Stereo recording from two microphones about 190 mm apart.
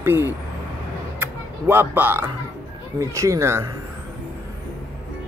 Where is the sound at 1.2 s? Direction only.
10° right (ahead or behind).